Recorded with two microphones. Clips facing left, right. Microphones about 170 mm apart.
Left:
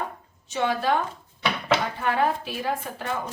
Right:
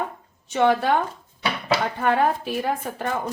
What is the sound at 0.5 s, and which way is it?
Speech, 55° right (ahead or behind).